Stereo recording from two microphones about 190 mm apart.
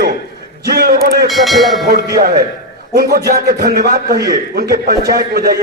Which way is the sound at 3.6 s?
45° right (ahead or behind).